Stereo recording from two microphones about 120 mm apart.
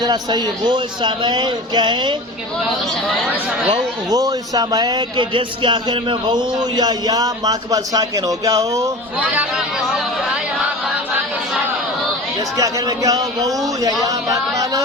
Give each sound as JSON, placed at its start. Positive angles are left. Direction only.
{"t": 0.0, "sound": "a man's voice", "side_deg": -35}
{"t": 4.1, "sound": "a man's voice", "side_deg": -30}
{"t": 9.2, "sound": "speech", "side_deg": -10}
{"t": 12.5, "sound": "a man's voice", "side_deg": -30}
{"t": 14.0, "sound": "a sound", "side_deg": -30}